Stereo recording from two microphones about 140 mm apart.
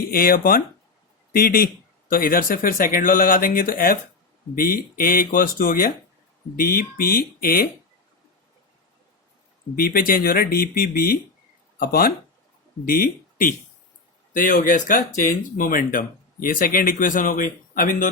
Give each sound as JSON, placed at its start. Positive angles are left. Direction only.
{"t": 0.1, "sound": "speech", "side_deg": 90}
{"t": 9.7, "sound": "speech", "side_deg": 90}
{"t": 14.3, "sound": "speech", "side_deg": 75}